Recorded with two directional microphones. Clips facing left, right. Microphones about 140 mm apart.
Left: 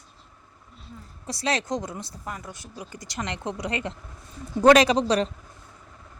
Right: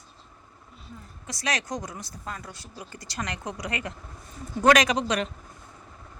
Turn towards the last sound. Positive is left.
turn(degrees=30)  # may be behind; listen again after turning